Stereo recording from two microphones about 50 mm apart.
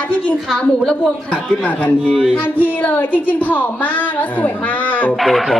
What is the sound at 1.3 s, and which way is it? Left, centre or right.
A woman's voice, left.